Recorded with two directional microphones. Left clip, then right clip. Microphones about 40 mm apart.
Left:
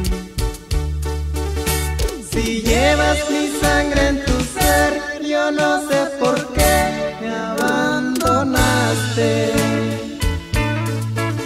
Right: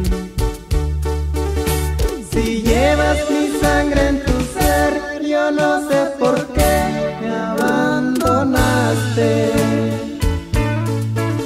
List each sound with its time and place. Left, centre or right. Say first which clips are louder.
2.3 s music: right 1 dB; left